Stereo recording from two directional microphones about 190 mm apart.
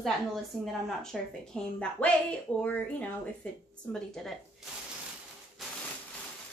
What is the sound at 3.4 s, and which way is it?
A woman's voice, 5° left (ahead or behind).